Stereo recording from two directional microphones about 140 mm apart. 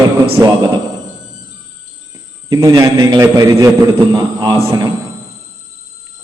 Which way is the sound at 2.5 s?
25° right (ahead or behind).